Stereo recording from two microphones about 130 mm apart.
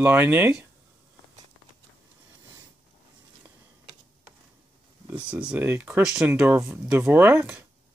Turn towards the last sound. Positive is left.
turn(degrees=-15)  # may be behind; listen again after turning